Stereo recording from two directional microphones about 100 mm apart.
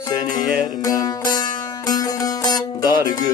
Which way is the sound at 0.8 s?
40° left (ahead or behind).